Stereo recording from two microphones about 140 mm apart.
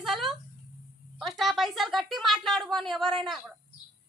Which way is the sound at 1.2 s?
Centre (ahead or behind).